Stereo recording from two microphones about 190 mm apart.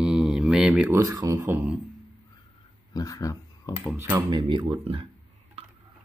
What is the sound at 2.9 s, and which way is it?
Speech, 15° left (ahead or behind).